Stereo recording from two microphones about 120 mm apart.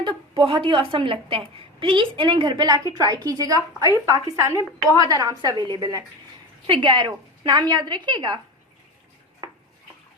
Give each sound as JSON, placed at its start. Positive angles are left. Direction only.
{"t": 0.0, "sound": "a woman's voice", "side_deg": -45}